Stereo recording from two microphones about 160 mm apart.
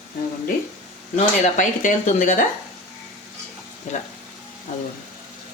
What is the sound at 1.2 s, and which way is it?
Speech, 50° left (ahead or behind).